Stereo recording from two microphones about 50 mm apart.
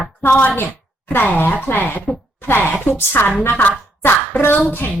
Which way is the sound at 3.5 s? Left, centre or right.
Left.